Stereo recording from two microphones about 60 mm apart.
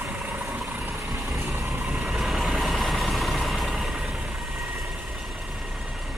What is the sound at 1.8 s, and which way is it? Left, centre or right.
Vehicle, centre.